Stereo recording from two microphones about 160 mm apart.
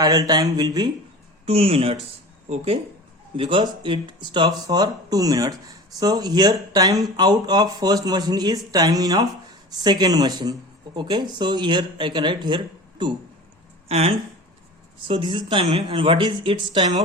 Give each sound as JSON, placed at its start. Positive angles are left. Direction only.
{"t": 0.0, "sound": "speech", "side_deg": -25}
{"t": 1.5, "sound": "speech", "side_deg": -35}